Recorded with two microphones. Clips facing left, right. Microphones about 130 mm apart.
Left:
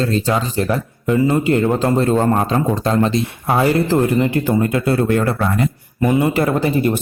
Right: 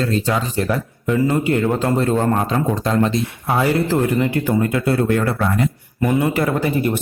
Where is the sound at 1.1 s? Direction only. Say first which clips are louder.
Left 2 dB; 30° left (ahead or behind).